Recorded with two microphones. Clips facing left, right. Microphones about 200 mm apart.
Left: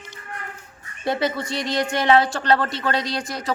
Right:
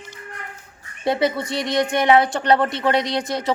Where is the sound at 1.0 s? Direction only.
20° right (ahead or behind).